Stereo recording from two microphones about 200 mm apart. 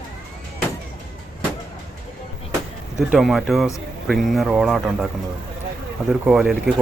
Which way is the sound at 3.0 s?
Centre (ahead or behind).